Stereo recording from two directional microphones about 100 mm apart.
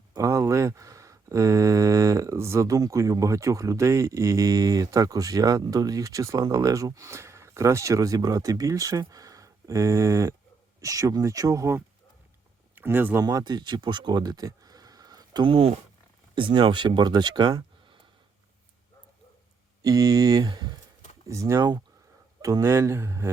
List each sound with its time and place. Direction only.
0.2 s speech: 30° right (ahead or behind)
13.1 s speech: 40° right (ahead or behind)
15.4 s speech: 70° right (ahead or behind)
16.3 s speech: 55° right (ahead or behind)
19.8 s speech: 35° right (ahead or behind)
21.2 s speech: 30° right (ahead or behind)